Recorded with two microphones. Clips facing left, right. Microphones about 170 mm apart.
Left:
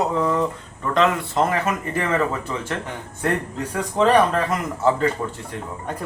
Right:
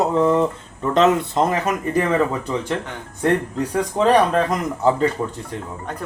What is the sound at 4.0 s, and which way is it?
Speech, 5° right (ahead or behind).